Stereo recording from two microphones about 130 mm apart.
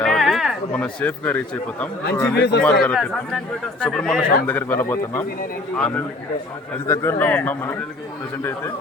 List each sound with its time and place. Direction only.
0.0 s a sound: centre (ahead or behind)
0.8 s a man's voice: 10° left (ahead or behind)
6.8 s a man's voice: 20° left (ahead or behind)